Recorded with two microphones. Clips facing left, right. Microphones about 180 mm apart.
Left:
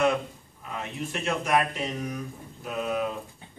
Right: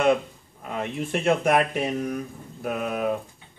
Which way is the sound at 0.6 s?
55° right (ahead or behind).